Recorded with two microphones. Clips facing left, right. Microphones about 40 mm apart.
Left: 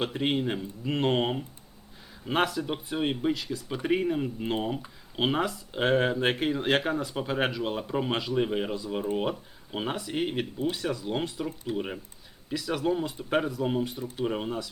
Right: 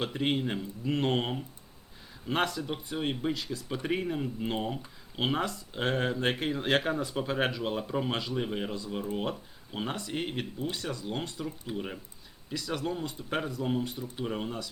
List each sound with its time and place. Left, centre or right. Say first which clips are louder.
0.0 s speech: left 2 dB; centre